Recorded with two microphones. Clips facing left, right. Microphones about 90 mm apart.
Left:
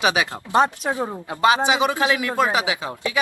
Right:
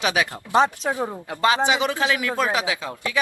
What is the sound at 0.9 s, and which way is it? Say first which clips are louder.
Speech: left 1 dB; 20° left (ahead or behind).